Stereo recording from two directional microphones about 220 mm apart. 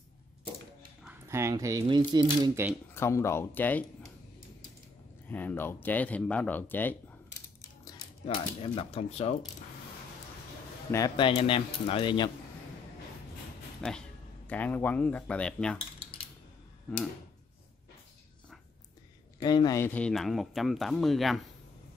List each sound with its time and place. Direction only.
1.0 s speech: 10° right (ahead or behind)
2.9 s speech: 10° left (ahead or behind)
5.3 s speech: 10° left (ahead or behind)
8.5 s speech: 25° left (ahead or behind)
10.9 s speech: 20° left (ahead or behind)
13.7 s speech: 5° left (ahead or behind)
19.4 s speech: 20° left (ahead or behind); by 21.4 s centre (ahead or behind)